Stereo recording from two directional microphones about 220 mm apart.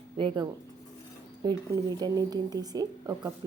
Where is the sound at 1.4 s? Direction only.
20° right (ahead or behind).